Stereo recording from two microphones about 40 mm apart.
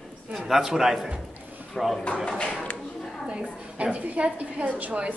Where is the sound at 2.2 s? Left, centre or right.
Left.